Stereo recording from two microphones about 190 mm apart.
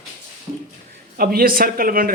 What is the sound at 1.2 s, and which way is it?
Speech, 50° right (ahead or behind).